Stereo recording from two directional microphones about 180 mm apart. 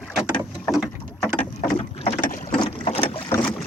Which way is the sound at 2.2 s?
50° left (ahead or behind).